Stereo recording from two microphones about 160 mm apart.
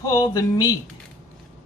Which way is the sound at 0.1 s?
20° left (ahead or behind).